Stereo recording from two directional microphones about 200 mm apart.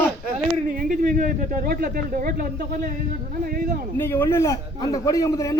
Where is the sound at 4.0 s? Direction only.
10° left (ahead or behind).